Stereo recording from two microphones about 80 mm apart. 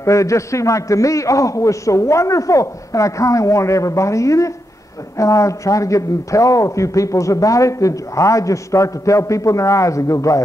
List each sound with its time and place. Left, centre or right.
0.0 s a man's voice: left